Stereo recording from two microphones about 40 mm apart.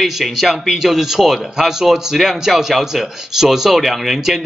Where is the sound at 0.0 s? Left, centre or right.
Centre.